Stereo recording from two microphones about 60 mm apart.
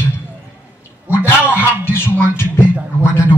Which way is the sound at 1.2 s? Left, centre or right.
Left.